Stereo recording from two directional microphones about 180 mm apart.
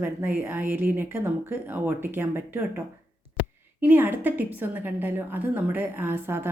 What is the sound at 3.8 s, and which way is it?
Speech, 10° right (ahead or behind).